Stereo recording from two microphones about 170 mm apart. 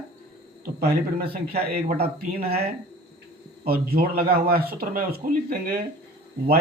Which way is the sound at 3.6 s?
60° right (ahead or behind).